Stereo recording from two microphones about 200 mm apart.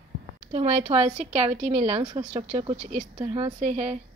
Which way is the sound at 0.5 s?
30° right (ahead or behind).